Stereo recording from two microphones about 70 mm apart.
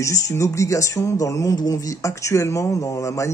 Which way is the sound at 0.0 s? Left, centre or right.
Left.